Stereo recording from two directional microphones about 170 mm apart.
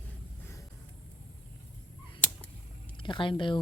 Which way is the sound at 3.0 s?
30° left (ahead or behind).